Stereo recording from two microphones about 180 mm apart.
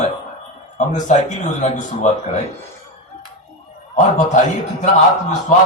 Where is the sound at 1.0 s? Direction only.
40° left (ahead or behind).